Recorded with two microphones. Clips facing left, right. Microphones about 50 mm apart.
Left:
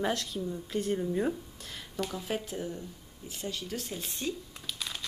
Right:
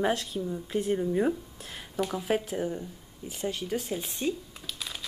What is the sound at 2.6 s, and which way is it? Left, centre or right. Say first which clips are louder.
Speech: right 5 dB; right.